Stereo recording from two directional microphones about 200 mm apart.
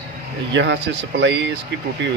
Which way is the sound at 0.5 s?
65° right (ahead or behind).